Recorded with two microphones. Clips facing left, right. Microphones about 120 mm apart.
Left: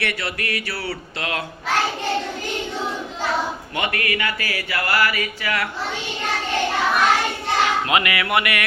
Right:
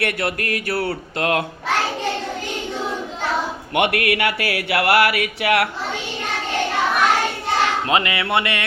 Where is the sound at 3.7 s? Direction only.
65° right (ahead or behind).